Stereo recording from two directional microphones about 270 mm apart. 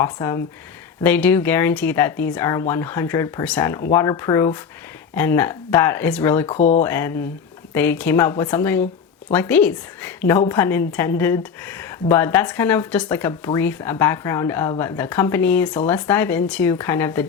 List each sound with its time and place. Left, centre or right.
0.0 s speech: centre
6.5 s speech: left
6.8 s a woman's voice: centre